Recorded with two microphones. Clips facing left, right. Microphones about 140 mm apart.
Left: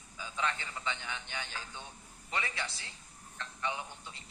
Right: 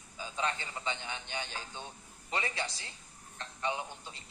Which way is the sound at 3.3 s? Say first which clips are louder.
Right 2 dB; 25° right (ahead or behind).